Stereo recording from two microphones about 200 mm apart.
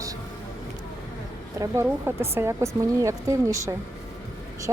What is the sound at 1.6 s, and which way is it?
A woman's voice, 10° right (ahead or behind).